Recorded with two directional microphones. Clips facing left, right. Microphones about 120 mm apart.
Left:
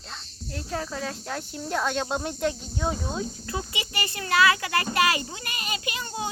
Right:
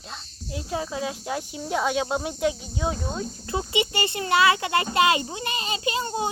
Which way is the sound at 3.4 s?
25° right (ahead or behind).